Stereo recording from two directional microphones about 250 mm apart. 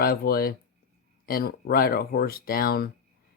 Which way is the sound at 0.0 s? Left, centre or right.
Left.